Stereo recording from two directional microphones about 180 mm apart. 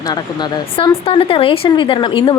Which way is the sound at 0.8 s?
30° left (ahead or behind).